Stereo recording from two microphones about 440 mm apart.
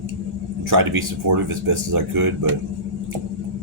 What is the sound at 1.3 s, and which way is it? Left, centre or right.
Speech, right.